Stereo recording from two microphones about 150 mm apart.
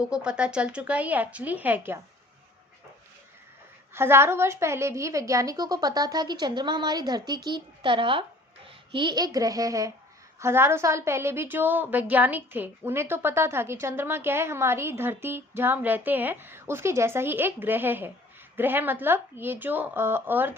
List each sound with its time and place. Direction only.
0.0 s a woman's voice: 5° right (ahead or behind)
3.9 s a woman's voice: 15° right (ahead or behind)